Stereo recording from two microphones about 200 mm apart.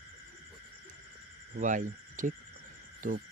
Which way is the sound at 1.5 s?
40° right (ahead or behind).